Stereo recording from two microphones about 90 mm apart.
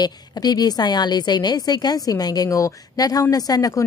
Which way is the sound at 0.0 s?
50° left (ahead or behind).